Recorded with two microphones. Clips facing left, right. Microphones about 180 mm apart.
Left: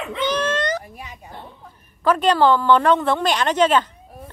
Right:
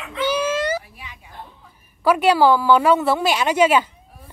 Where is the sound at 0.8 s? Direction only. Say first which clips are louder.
Left 5 dB; 45° left (ahead or behind).